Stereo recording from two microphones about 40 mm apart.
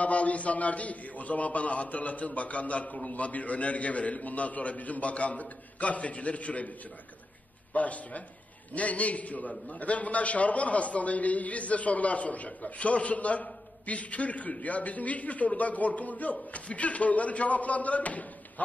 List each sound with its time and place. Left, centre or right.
0.0 s a man's voice: left
7.7 s a man's voice: left